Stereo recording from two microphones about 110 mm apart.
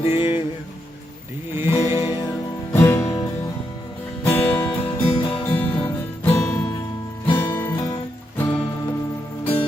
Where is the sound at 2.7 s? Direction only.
25° left (ahead or behind).